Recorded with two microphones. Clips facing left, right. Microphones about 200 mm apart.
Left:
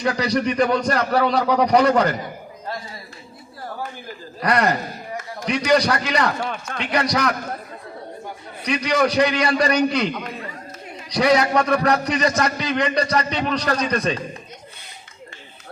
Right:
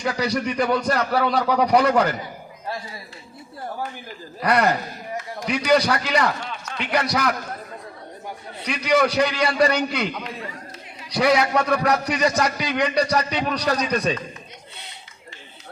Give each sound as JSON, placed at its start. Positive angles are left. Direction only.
{"t": 0.0, "sound": "a man's voice", "side_deg": -5}
{"t": 4.4, "sound": "a man's voice", "side_deg": -5}
{"t": 6.4, "sound": "speech", "side_deg": 55}
{"t": 6.9, "sound": "a man's voice", "side_deg": -5}
{"t": 8.6, "sound": "a man's voice", "side_deg": -5}
{"t": 11.1, "sound": "a man's voice", "side_deg": -5}